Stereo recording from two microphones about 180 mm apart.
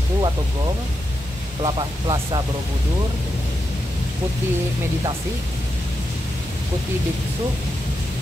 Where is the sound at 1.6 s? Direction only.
25° right (ahead or behind).